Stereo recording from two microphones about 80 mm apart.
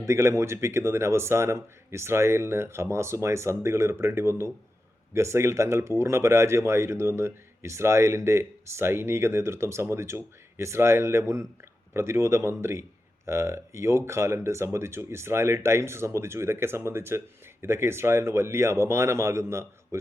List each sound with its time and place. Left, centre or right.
0.0 s speech: right